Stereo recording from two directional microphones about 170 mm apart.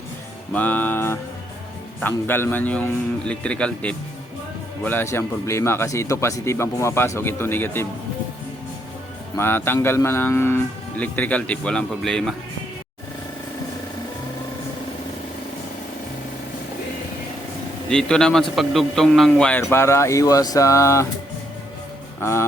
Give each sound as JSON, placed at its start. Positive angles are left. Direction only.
{"t": 0.5, "sound": "a man's voice", "side_deg": 10}
{"t": 9.4, "sound": "a man's voice", "side_deg": 15}
{"t": 17.8, "sound": "a man's voice", "side_deg": 5}
{"t": 22.2, "sound": "a man's voice", "side_deg": 15}